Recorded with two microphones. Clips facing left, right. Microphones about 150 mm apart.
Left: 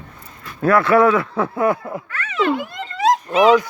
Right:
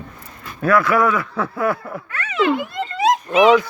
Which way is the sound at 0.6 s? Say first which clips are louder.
Left 3 dB; 25° left (ahead or behind).